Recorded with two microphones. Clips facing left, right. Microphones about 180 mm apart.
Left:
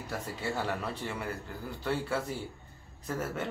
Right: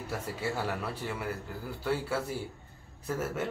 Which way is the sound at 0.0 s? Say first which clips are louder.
Right 2 dB; 10° right (ahead or behind).